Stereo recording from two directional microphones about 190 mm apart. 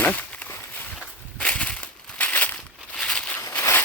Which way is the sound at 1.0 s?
5° left (ahead or behind).